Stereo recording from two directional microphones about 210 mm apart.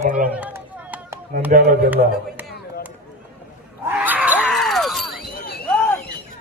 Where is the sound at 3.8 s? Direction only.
10° right (ahead or behind).